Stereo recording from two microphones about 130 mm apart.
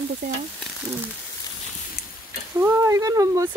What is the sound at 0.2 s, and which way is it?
Stir, 90° right.